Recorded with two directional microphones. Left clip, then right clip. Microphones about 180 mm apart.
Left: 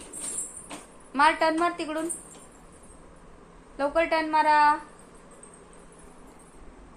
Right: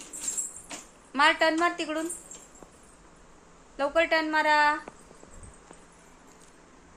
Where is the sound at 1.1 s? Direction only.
40° right (ahead or behind).